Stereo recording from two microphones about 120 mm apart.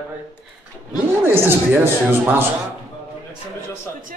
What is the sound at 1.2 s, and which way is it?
Speech, 20° right (ahead or behind).